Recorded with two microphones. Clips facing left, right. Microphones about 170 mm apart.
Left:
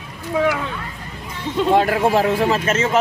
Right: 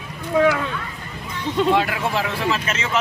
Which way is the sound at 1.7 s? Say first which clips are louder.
Left 8 dB; 45° left (ahead or behind).